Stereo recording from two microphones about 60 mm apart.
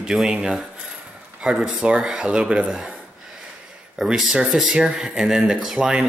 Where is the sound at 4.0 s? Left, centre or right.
Centre.